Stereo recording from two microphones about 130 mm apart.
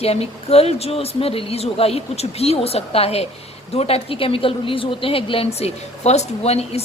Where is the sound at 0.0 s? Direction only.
50° left (ahead or behind).